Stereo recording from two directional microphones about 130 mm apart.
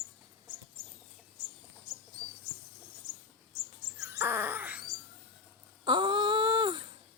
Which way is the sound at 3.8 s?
25° right (ahead or behind).